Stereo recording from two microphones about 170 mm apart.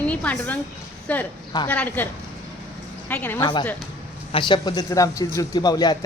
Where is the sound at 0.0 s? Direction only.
10° left (ahead or behind).